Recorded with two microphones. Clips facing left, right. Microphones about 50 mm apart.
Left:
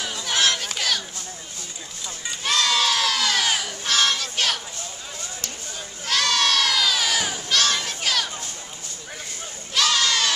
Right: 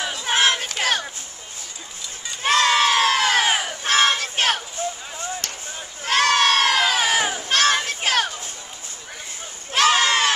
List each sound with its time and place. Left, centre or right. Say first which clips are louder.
0.0 s crowd: right 3 dB; right
0.7 s a sound: right 4 dB; right
2.4 s crowd: right 5 dB; right
9.8 s crowd: right 4 dB; right